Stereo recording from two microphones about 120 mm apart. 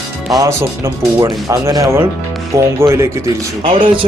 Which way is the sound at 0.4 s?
25° right (ahead or behind).